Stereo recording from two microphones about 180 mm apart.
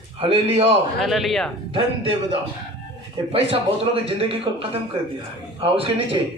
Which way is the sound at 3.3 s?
30° right (ahead or behind).